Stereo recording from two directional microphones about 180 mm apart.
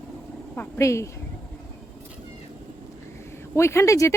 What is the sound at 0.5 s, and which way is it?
Speech, 15° left (ahead or behind).